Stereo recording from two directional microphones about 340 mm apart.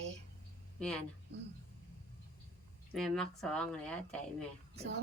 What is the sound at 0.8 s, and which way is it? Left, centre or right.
Speech, centre.